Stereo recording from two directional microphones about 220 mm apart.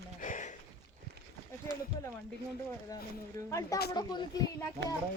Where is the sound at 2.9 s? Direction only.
15° left (ahead or behind).